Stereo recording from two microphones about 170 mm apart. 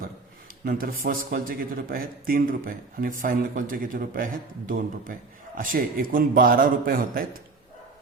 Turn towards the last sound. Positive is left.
turn(degrees=-60)  # may be behind; listen again after turning